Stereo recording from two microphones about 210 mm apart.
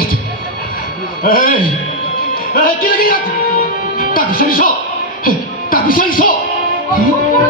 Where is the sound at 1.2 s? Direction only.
40° left (ahead or behind).